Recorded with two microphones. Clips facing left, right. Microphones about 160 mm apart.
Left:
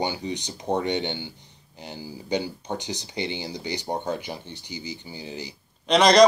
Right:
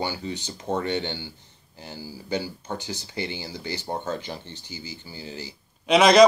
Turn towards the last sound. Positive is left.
turn(degrees=-5)  # may be behind; listen again after turning